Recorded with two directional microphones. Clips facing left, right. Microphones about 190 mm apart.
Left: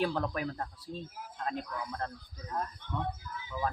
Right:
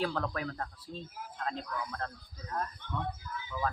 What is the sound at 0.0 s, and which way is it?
Speech, 15° left (ahead or behind).